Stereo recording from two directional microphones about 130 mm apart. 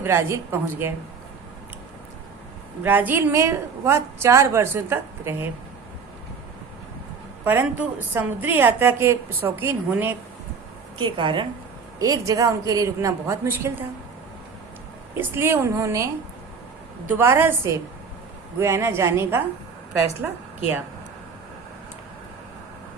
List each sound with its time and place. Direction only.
0.0 s a woman's voice: 20° right (ahead or behind)
2.8 s a woman's voice: 15° right (ahead or behind)
7.4 s a woman's voice: 15° right (ahead or behind)
11.2 s a woman's voice: 35° right (ahead or behind)
11.9 s a woman's voice: 25° right (ahead or behind)
15.2 s a woman's voice: 20° right (ahead or behind)
17.1 s a woman's voice: 15° right (ahead or behind)